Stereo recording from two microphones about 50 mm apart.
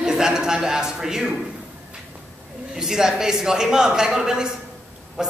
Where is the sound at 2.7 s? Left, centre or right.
Centre.